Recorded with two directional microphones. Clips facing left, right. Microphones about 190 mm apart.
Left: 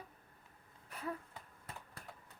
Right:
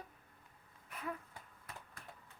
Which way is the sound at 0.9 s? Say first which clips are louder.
Left 1 dB; 35° left (ahead or behind).